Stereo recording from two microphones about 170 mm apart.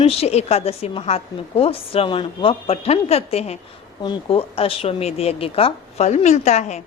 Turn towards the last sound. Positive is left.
turn(degrees=45)  # may be behind; listen again after turning